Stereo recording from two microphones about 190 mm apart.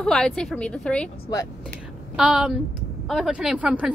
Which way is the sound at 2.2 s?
5° right (ahead or behind).